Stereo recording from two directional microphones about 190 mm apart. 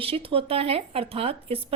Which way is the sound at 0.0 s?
30° right (ahead or behind).